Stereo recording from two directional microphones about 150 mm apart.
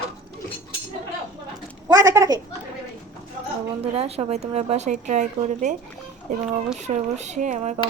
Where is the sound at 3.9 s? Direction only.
45° right (ahead or behind).